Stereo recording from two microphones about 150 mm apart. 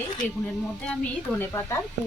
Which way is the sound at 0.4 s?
10° left (ahead or behind).